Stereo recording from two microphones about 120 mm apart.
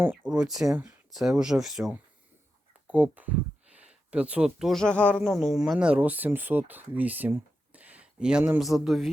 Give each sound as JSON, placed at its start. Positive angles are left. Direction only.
{"t": 0.0, "sound": "speech", "side_deg": -15}
{"t": 0.3, "sound": "speech", "side_deg": -5}